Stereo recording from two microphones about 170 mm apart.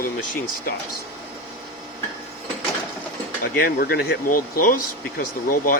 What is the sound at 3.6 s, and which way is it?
Speech, 60° left (ahead or behind).